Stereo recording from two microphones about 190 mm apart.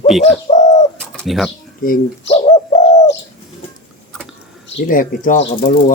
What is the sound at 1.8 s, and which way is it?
Speech, 45° left (ahead or behind).